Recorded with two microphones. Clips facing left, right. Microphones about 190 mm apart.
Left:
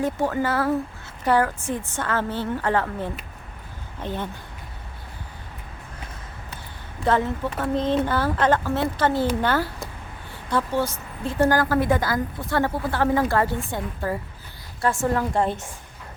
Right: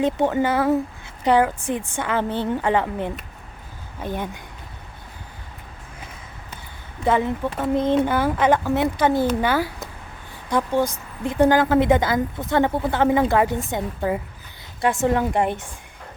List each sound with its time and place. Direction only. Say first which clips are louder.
0.0 s speech: right 4 dB; 20° right (ahead or behind)
7.0 s speech: right 2 dB; 15° right (ahead or behind)